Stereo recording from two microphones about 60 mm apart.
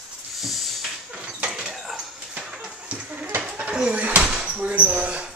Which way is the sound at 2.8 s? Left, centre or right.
Right.